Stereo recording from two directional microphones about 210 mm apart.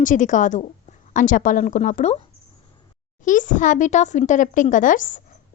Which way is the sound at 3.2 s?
35° left (ahead or behind).